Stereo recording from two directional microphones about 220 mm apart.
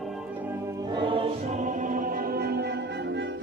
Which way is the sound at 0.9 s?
25° right (ahead or behind).